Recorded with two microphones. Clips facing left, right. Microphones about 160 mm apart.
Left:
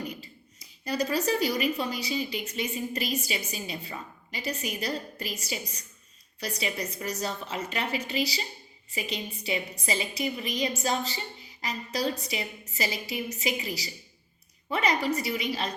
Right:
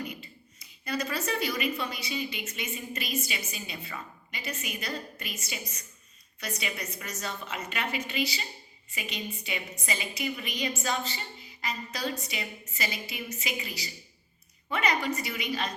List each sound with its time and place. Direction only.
0.9 s a woman's voice: 35° left (ahead or behind)